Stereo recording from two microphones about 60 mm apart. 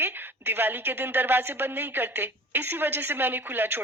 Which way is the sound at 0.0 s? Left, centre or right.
Right.